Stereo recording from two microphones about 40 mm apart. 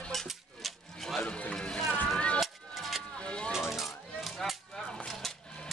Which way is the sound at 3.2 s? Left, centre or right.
Left.